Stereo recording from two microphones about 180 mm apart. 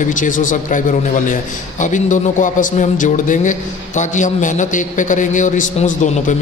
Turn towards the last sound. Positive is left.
turn(degrees=45)  # may be behind; listen again after turning